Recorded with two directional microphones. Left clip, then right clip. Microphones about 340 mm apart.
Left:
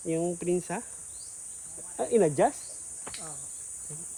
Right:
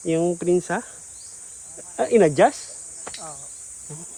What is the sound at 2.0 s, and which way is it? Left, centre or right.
Speech, right.